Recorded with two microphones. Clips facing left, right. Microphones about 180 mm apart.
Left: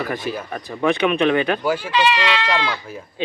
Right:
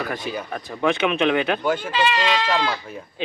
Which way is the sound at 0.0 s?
Centre (ahead or behind).